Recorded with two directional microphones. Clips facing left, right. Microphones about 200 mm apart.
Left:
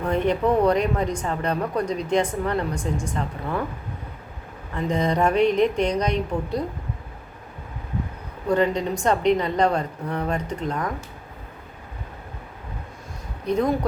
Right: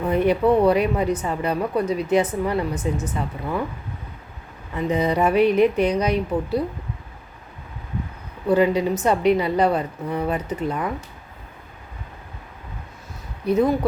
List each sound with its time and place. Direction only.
0.0 s a woman's voice: 5° right (ahead or behind)
4.7 s a woman's voice: 5° right (ahead or behind)
8.4 s a woman's voice: 5° right (ahead or behind)
13.4 s a woman's voice: 5° right (ahead or behind)